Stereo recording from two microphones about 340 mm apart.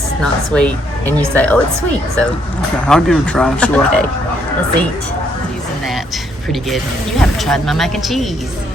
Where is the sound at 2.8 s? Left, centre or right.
Centre.